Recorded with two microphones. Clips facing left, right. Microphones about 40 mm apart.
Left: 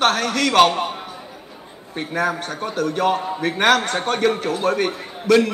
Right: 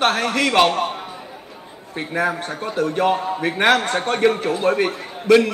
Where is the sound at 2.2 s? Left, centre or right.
Right.